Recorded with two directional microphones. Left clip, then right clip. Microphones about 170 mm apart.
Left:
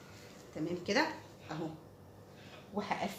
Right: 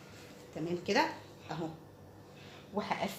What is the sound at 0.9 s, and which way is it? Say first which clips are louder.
Speech: right 2 dB; 20° right (ahead or behind).